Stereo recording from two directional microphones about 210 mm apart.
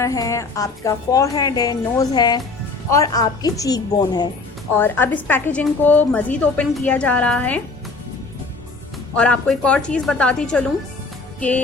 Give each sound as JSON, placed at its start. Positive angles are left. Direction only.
{"t": 0.0, "sound": "a woman's voice", "side_deg": 15}
{"t": 9.1, "sound": "a woman's voice", "side_deg": 5}
{"t": 11.3, "sound": "music", "side_deg": 5}